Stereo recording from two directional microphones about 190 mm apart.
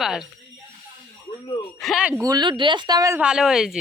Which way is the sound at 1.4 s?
25° left (ahead or behind).